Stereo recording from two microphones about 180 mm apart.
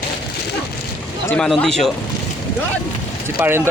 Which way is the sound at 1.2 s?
5° left (ahead or behind).